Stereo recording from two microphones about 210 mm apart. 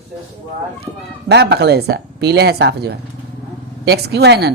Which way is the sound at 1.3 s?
55° right (ahead or behind).